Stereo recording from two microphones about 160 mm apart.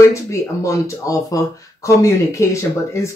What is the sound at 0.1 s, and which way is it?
Speech, 20° left (ahead or behind).